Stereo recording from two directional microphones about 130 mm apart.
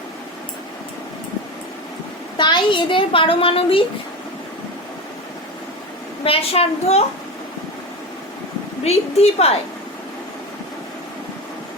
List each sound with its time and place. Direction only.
2.4 s a child's voice: 35° left (ahead or behind)
6.2 s a woman's voice: 50° left (ahead or behind)
8.8 s a woman's voice: 55° left (ahead or behind)